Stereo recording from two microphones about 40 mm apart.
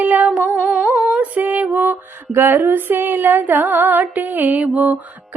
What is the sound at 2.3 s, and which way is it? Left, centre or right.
Female singing, right.